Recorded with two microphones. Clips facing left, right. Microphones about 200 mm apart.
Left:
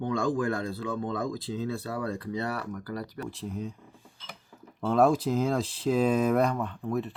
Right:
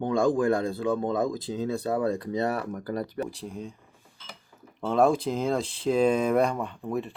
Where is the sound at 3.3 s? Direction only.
5° left (ahead or behind).